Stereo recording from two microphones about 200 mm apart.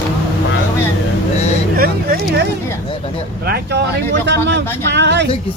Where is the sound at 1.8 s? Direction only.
50° right (ahead or behind).